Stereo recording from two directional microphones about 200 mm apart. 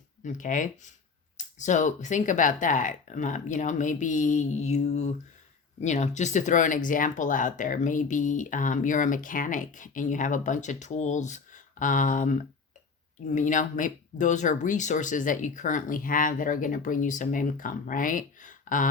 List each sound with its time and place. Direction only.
0.2 s speech: 40° left (ahead or behind)